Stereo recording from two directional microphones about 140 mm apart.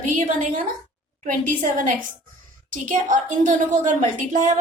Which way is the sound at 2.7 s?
70° right (ahead or behind).